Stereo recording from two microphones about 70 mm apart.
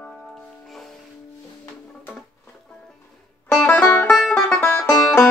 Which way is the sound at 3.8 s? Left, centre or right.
Left.